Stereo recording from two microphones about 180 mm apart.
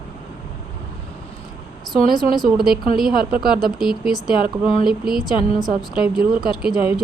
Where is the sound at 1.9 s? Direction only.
Centre (ahead or behind).